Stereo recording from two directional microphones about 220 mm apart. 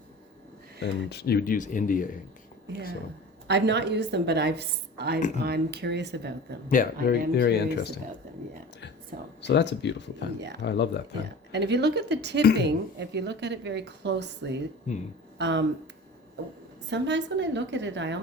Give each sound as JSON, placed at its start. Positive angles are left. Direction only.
{"t": 0.8, "sound": "speech", "side_deg": 45}
{"t": 3.4, "sound": "a woman's voice", "side_deg": -50}
{"t": 6.8, "sound": "speech", "side_deg": 40}
{"t": 9.4, "sound": "speech", "side_deg": 50}
{"t": 11.5, "sound": "a woman's voice", "side_deg": -50}
{"t": 14.9, "sound": "speech", "side_deg": 35}
{"t": 15.4, "sound": "a woman's voice", "side_deg": -55}
{"t": 16.9, "sound": "a woman's voice", "side_deg": -55}